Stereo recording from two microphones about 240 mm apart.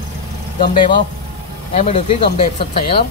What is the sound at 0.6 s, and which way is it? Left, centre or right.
Speech, left.